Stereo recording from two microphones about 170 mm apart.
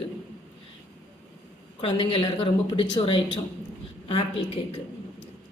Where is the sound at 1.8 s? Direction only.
30° left (ahead or behind).